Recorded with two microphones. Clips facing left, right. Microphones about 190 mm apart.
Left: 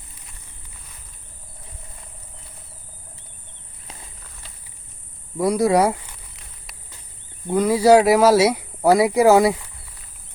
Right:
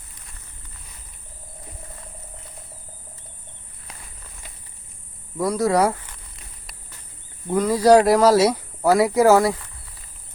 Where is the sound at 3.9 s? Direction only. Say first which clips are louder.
Left 2 dB; 25° left (ahead or behind).